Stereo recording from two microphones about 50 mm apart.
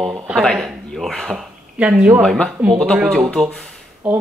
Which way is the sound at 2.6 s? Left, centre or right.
Right.